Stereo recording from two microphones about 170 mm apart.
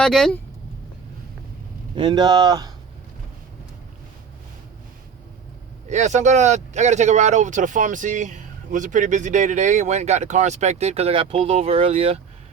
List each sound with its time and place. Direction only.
0.0 s speech: 5° left (ahead or behind)
2.0 s speech: 25° right (ahead or behind)
5.9 s speech: 45° right (ahead or behind)